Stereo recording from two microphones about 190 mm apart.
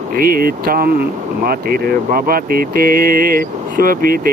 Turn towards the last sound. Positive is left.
turn(degrees=-50)  # may be behind; listen again after turning